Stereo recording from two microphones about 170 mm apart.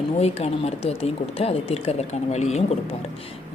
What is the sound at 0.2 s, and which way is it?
Speech, 40° left (ahead or behind).